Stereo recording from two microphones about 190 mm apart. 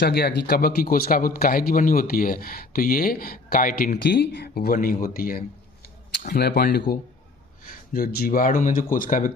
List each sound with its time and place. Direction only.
0.0 s speech: 55° left (ahead or behind)